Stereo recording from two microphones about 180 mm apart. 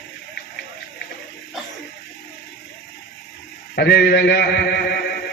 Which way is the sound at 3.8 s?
65° left (ahead or behind).